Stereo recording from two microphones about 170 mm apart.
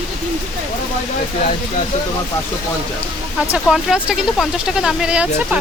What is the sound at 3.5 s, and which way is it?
Speech, 5° right (ahead or behind).